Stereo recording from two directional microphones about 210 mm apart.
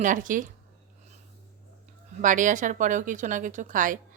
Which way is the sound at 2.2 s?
35° right (ahead or behind).